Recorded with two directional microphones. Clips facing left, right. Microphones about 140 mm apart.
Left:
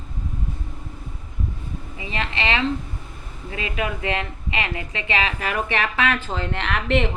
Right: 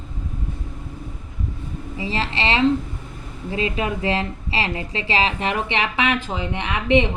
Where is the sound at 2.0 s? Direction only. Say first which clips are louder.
Right 3 dB; 30° right (ahead or behind).